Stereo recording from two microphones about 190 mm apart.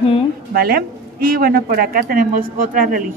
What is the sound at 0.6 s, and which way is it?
Speech, 50° right (ahead or behind).